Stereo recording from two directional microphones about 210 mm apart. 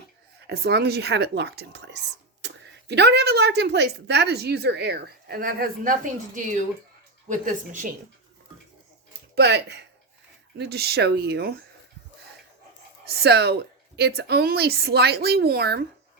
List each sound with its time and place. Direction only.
0.4 s a woman's voice: 50° right (ahead or behind)
9.3 s a woman's voice: 50° right (ahead or behind)
13.2 s a woman's voice: 50° right (ahead or behind)